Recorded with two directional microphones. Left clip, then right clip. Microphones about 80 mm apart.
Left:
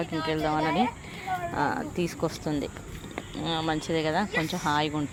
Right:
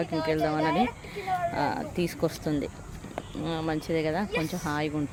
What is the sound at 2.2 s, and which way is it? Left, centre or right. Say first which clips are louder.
Speech: right 1 dB; right.